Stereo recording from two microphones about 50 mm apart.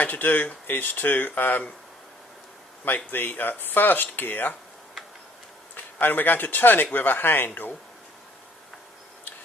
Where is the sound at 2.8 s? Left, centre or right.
Left.